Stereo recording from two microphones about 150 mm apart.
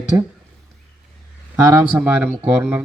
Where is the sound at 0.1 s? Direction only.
20° right (ahead or behind).